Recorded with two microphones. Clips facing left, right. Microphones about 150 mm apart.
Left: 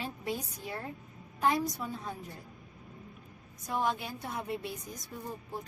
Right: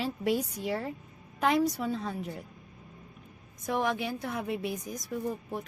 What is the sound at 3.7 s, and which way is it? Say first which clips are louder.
A woman's voice: right 3 dB; 75° right (ahead or behind).